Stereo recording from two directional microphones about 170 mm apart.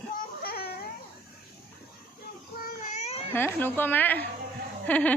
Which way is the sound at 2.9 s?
40° left (ahead or behind).